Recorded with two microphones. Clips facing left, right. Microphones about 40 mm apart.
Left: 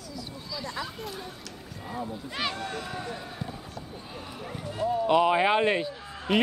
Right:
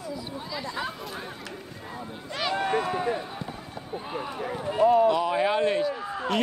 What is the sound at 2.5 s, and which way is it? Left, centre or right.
Speech, right.